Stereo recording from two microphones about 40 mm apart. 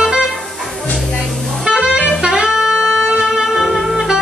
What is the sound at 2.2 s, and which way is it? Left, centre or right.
Music, right.